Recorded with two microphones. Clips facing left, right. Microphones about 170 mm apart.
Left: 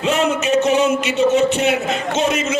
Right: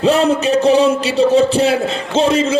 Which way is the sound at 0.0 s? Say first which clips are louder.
Right 5 dB; 35° right (ahead or behind).